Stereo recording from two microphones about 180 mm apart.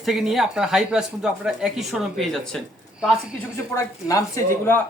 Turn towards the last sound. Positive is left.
turn(degrees=15)  # may be behind; listen again after turning